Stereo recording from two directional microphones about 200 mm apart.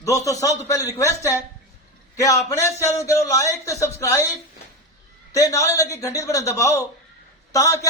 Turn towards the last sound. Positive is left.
turn(degrees=15)  # may be behind; listen again after turning